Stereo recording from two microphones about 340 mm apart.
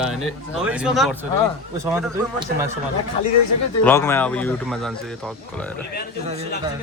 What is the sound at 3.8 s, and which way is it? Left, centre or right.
Speech, centre.